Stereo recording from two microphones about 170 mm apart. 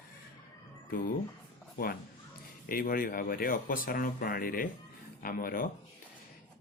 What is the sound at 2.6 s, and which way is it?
Speech, 55° left (ahead or behind).